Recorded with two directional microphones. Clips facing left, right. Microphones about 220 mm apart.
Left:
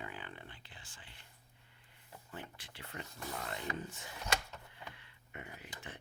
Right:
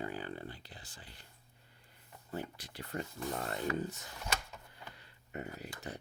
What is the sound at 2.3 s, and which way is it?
Speech, 40° right (ahead or behind).